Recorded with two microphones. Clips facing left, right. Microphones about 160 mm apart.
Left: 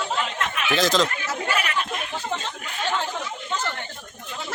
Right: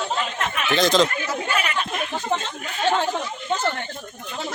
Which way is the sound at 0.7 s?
5° left (ahead or behind).